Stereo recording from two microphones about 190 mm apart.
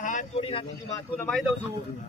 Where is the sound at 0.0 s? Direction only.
40° left (ahead or behind).